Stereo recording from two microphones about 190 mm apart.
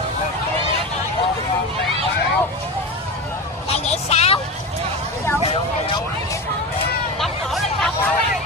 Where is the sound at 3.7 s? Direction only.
35° left (ahead or behind).